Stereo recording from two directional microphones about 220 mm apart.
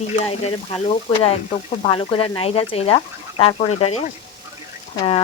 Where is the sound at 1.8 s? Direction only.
25° left (ahead or behind).